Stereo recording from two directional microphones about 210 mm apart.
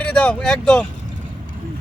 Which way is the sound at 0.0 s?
5° left (ahead or behind).